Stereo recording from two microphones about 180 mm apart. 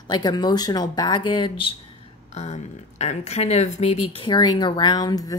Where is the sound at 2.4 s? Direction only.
40° left (ahead or behind).